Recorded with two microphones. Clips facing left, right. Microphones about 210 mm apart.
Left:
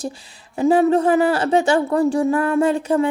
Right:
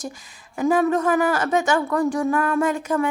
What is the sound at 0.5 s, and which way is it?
Speech, 30° left (ahead or behind).